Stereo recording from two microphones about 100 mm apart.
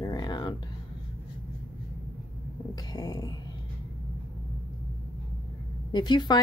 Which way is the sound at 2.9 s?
40° left (ahead or behind).